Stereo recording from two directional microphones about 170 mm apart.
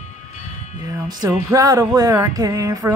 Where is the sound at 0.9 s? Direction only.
20° right (ahead or behind).